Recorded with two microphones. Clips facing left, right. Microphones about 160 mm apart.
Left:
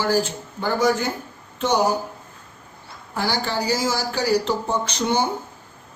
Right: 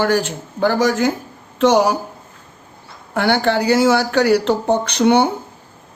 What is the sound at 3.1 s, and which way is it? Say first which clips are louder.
Speech: right 8 dB; 65° right (ahead or behind).